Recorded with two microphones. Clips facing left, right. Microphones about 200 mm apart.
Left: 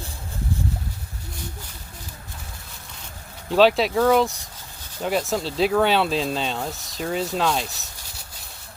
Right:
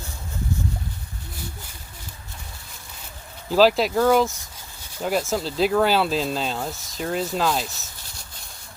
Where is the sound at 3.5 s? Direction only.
Centre (ahead or behind).